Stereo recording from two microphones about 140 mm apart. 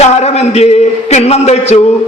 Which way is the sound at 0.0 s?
50° left (ahead or behind).